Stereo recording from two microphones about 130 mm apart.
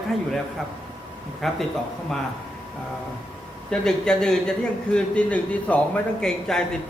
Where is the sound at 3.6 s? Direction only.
5° left (ahead or behind).